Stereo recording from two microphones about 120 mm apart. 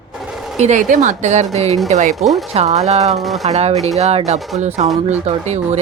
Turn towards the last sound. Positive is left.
turn(degrees=-65)  # may be behind; listen again after turning